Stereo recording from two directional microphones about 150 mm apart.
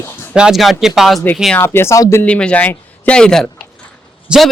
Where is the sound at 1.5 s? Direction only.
15° left (ahead or behind).